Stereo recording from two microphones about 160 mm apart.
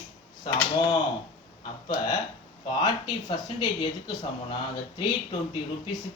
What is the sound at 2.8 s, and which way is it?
Speech, 25° left (ahead or behind).